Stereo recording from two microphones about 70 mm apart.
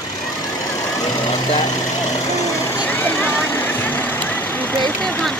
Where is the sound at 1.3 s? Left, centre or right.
Left.